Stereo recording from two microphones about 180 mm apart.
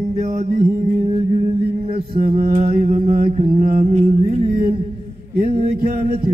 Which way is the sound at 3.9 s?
35° right (ahead or behind).